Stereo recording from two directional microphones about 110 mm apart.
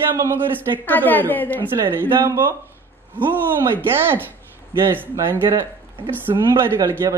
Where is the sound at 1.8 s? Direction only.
25° right (ahead or behind).